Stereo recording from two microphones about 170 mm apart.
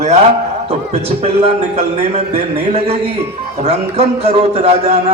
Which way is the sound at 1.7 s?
40° right (ahead or behind).